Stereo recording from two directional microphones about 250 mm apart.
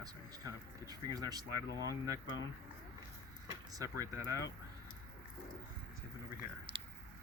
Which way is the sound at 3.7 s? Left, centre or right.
Centre.